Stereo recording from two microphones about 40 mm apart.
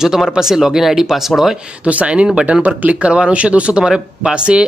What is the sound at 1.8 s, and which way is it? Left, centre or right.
Speech, right.